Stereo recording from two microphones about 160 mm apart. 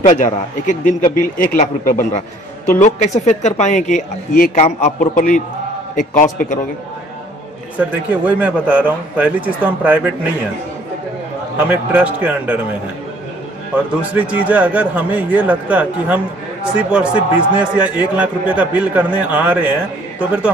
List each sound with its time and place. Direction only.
0.0 s a man's voice: 50° left (ahead or behind)
4.6 s a man's voice: 45° left (ahead or behind)
7.7 s a man's voice: 10° right (ahead or behind)
11.6 s a man's voice: 10° right (ahead or behind)
14.1 s a man's voice: 10° right (ahead or behind)